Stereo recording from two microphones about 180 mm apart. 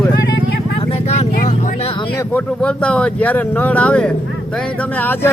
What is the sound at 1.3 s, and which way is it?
Speech, 45° left (ahead or behind).